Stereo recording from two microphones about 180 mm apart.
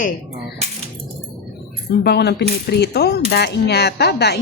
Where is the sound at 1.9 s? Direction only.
65° left (ahead or behind).